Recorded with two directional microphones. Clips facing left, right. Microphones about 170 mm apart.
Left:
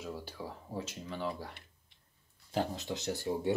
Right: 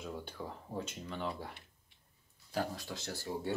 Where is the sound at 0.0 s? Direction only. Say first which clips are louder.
Left 1 dB; 5° left (ahead or behind).